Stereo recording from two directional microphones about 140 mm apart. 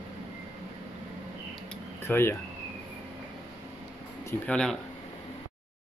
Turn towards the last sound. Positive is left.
turn(degrees=5)  # may be behind; listen again after turning